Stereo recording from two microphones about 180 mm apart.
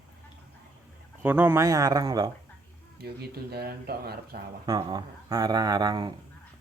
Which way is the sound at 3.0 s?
65° right (ahead or behind).